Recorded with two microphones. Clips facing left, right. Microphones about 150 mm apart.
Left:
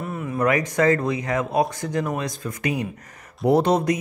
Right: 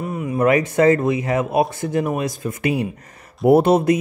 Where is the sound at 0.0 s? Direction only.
5° right (ahead or behind).